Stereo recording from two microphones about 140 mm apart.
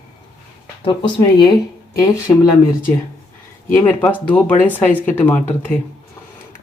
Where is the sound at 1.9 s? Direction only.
25° left (ahead or behind).